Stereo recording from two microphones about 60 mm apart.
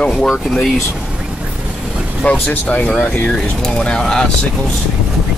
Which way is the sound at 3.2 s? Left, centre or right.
Centre.